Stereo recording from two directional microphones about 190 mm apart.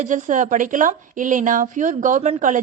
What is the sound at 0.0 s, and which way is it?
A woman's voice, 40° right (ahead or behind).